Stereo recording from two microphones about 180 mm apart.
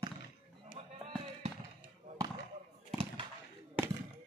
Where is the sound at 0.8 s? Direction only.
30° right (ahead or behind).